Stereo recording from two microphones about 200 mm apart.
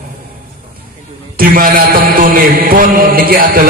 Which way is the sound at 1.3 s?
45° right (ahead or behind).